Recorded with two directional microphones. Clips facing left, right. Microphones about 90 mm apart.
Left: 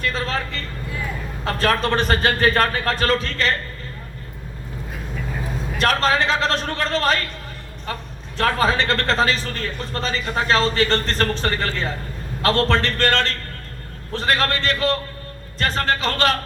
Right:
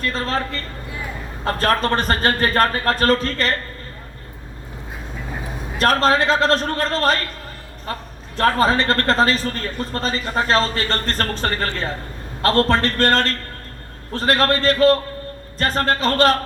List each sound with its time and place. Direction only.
0.0 s speech: 40° right (ahead or behind)
5.8 s speech: 40° right (ahead or behind)
8.4 s speech: 40° right (ahead or behind)